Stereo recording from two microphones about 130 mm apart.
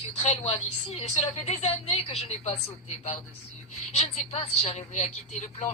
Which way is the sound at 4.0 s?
50° left (ahead or behind).